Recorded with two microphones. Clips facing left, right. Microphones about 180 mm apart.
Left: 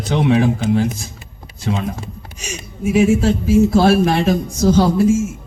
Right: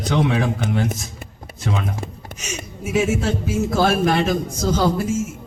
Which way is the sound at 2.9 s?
30° left (ahead or behind).